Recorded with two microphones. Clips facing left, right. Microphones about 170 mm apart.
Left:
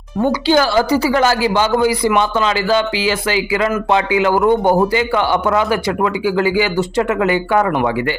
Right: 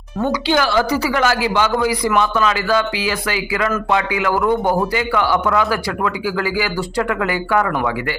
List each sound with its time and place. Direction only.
0.3 s a woman's voice: 35° left (ahead or behind)
2.0 s speech: centre (ahead or behind)
2.3 s a man's voice: 30° left (ahead or behind)